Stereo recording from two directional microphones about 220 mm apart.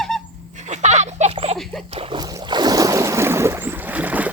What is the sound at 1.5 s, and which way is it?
Dog, centre (ahead or behind).